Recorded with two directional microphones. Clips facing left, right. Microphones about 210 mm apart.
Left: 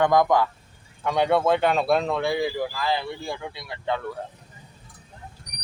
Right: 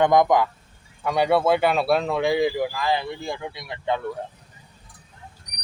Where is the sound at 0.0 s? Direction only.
20° right (ahead or behind).